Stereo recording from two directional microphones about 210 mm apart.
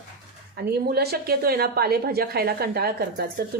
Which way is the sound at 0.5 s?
50° right (ahead or behind).